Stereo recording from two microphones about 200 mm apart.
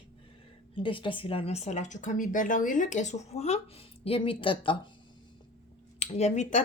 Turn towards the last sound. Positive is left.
turn(degrees=35)  # may be behind; listen again after turning